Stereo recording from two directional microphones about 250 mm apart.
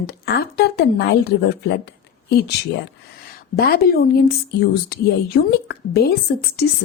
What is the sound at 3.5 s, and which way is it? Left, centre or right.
Speech, left.